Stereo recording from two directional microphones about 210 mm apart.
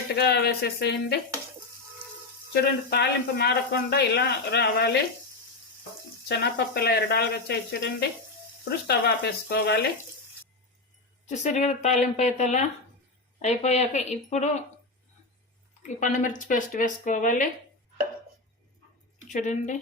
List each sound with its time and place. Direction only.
0.2 s speech: 50° left (ahead or behind)
2.5 s speech: 50° left (ahead or behind)
6.2 s speech: 50° left (ahead or behind)
11.3 s speech: 35° left (ahead or behind)
16.0 s speech: 35° left (ahead or behind)
19.3 s speech: 35° left (ahead or behind)